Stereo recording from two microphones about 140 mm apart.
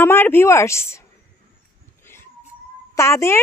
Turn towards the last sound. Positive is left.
turn(degrees=20)  # may be behind; listen again after turning